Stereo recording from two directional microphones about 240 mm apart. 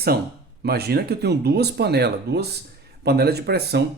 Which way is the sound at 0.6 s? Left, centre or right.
Right.